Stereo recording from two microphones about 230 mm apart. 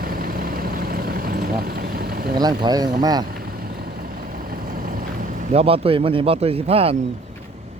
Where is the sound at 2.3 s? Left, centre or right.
Centre.